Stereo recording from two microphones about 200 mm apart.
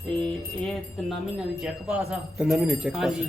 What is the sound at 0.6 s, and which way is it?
Speech, centre (ahead or behind).